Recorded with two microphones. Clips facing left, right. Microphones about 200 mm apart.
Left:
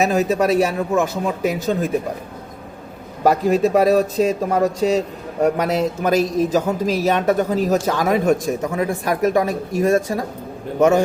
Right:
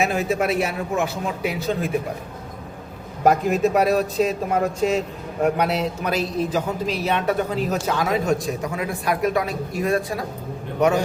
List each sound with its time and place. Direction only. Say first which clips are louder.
0.0 s a man's voice: left 4 dB; 40° left (ahead or behind)
3.5 s a man's voice: left 4 dB; 35° left (ahead or behind); by 8.4 s 55° left (ahead or behind)
8.9 s a man's voice: left 2 dB; 45° left (ahead or behind)